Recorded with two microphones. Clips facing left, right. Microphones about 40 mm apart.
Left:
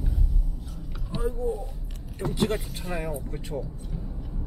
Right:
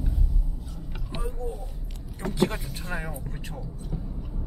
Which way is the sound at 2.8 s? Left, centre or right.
Centre.